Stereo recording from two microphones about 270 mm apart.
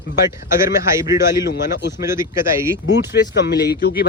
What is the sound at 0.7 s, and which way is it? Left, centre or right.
Speech, centre.